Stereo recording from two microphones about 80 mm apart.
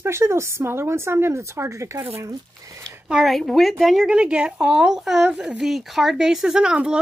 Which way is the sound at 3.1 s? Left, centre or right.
Centre.